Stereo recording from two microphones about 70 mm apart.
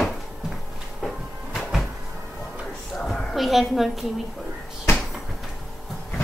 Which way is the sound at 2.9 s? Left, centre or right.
Centre.